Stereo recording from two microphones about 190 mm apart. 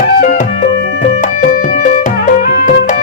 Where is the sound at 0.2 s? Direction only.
50° left (ahead or behind).